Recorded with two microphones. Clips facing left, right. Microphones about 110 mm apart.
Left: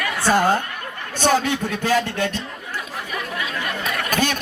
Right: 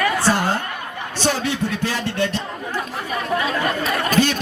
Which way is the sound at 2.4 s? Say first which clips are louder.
Right 4 dB; 40° right (ahead or behind).